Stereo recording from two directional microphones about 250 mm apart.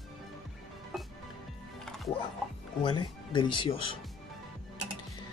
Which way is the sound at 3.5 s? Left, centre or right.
Left.